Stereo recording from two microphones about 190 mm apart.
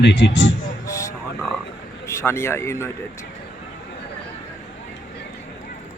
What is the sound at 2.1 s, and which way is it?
Speech, 15° left (ahead or behind).